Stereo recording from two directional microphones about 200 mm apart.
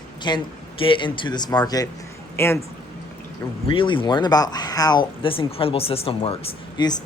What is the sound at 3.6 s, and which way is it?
Speech, 25° left (ahead or behind).